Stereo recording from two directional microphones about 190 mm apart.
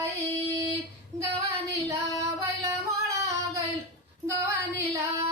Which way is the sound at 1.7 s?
15° right (ahead or behind).